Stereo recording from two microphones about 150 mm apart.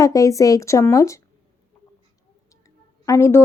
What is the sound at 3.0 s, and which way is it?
Speech, 20° left (ahead or behind).